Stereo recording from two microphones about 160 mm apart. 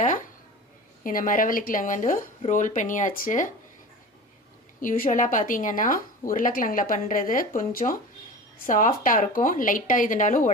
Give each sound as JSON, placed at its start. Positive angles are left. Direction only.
{"t": 1.0, "sound": "speech", "side_deg": 55}
{"t": 4.8, "sound": "speech", "side_deg": 55}